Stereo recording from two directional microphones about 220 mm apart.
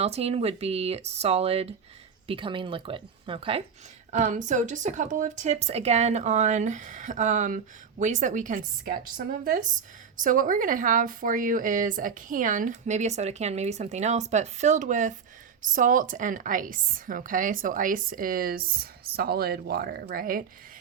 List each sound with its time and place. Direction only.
0.0 s speech: 30° right (ahead or behind)
4.1 s speech: 35° right (ahead or behind)